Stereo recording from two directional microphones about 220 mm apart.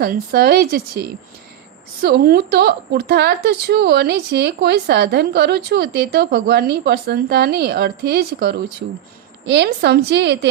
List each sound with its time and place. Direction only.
0.0 s a woman's voice: 40° right (ahead or behind)